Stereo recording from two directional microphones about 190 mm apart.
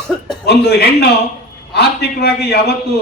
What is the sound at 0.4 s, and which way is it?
A man's voice, 60° left (ahead or behind).